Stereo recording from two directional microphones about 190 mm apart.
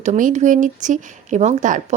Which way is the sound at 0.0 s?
40° right (ahead or behind).